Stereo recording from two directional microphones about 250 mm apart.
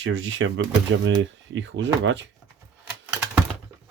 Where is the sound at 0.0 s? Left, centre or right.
Right.